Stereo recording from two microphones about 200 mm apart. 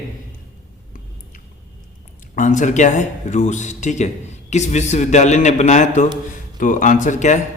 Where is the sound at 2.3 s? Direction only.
40° left (ahead or behind).